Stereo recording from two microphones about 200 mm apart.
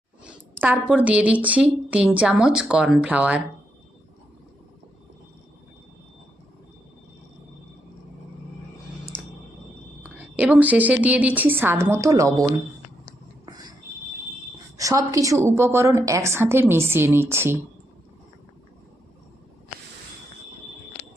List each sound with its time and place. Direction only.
0.3 s a sound: 10° right (ahead or behind)
0.9 s a woman's voice: 5° right (ahead or behind)
10.0 s a woman's voice: 10° right (ahead or behind)
13.4 s whispering: 20° right (ahead or behind)
14.8 s a woman's voice: 15° right (ahead or behind)